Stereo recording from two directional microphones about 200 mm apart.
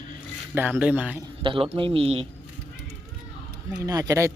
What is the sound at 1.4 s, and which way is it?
Speech, 25° right (ahead or behind).